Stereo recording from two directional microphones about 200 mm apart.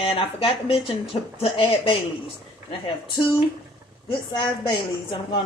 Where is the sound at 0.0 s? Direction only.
25° left (ahead or behind).